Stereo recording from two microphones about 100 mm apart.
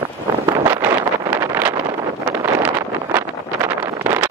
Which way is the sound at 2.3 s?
20° right (ahead or behind).